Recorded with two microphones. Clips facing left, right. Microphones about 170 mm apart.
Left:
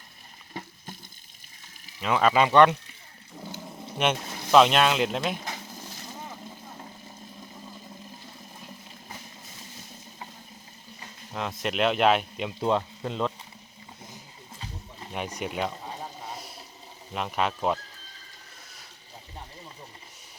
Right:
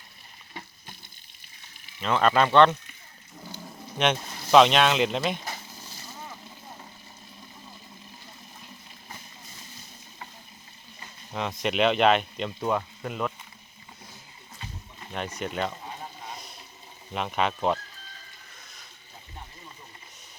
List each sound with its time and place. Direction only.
2.0 s speech: 5° left (ahead or behind)
3.9 s speech: 5° left (ahead or behind)
11.3 s speech: centre (ahead or behind)
12.5 s speech: 25° left (ahead or behind)
15.1 s speech: 10° left (ahead or behind)
16.3 s water: 5° left (ahead or behind)
17.2 s speech: centre (ahead or behind)